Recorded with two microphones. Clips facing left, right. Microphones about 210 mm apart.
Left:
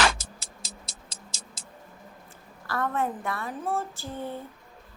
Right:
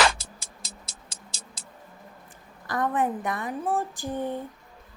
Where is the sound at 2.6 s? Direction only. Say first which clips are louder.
Right 3 dB; 15° right (ahead or behind).